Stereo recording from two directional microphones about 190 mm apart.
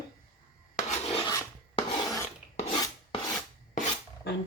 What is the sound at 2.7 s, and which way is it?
Filing, 20° left (ahead or behind).